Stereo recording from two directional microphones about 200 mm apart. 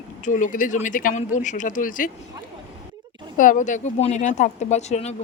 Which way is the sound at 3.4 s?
40° left (ahead or behind).